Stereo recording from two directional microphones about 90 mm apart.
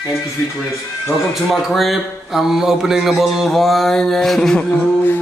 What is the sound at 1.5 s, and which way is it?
Speech, centre (ahead or behind).